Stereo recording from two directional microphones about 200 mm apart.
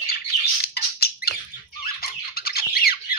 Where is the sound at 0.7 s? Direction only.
50° left (ahead or behind).